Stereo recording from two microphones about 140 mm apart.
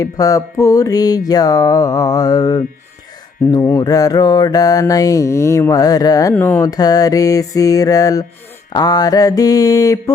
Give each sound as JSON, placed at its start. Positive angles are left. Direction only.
{"t": 0.0, "sound": "mantra", "side_deg": 25}
{"t": 6.3, "sound": "mantra", "side_deg": 15}